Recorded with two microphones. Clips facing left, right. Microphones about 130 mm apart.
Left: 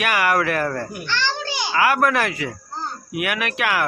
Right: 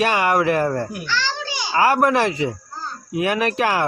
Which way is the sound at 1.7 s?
30° right (ahead or behind).